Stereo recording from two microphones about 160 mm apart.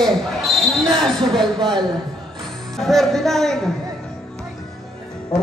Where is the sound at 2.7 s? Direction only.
Centre (ahead or behind).